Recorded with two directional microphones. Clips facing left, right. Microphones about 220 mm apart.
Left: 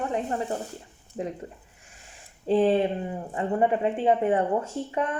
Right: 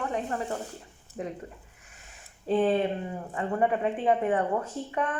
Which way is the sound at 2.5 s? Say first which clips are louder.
Left 3 dB; 30° left (ahead or behind).